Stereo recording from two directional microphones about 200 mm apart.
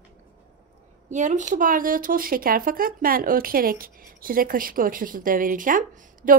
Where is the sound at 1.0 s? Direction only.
35° right (ahead or behind).